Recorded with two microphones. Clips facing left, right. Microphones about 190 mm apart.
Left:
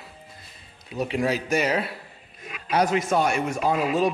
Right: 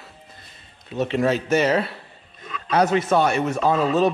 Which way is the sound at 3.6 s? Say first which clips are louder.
Right 3 dB; 30° right (ahead or behind).